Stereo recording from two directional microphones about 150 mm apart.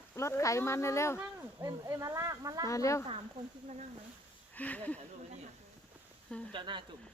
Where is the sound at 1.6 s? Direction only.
20° right (ahead or behind).